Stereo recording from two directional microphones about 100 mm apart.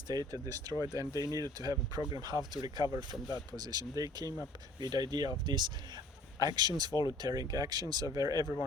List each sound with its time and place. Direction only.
0.1 s speech: 35° right (ahead or behind)